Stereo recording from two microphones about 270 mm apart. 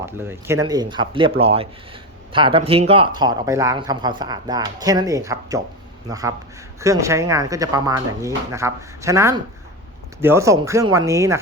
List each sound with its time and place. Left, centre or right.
0.0 s speech: centre